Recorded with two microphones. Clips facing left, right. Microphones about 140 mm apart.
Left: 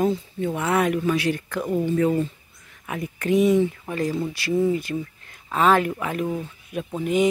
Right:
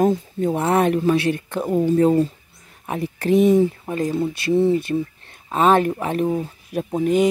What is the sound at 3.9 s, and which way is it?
Speech, 25° right (ahead or behind).